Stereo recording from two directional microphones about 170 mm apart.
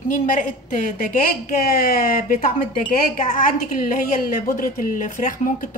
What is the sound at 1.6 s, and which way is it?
Speech, 60° left (ahead or behind).